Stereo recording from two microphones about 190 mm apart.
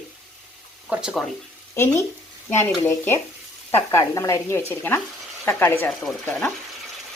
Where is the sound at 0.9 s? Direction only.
5° right (ahead or behind).